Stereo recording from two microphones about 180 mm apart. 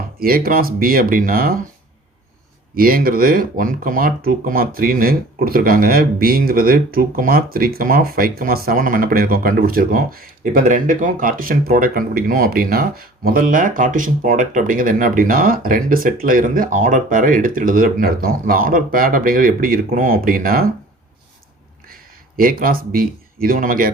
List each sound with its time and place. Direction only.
0.2 s speech: 55° right (ahead or behind)
2.7 s speech: 55° right (ahead or behind)
22.4 s speech: 55° right (ahead or behind)